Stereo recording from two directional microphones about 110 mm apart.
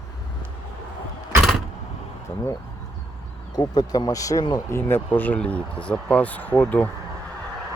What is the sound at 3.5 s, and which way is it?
Speech, 35° left (ahead or behind).